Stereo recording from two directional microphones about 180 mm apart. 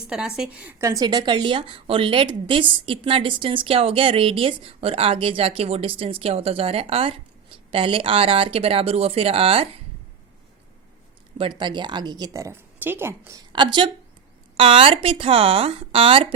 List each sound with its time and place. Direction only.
0.1 s speech: 5° right (ahead or behind); by 9.6 s 30° right (ahead or behind)
11.3 s speech: 25° right (ahead or behind)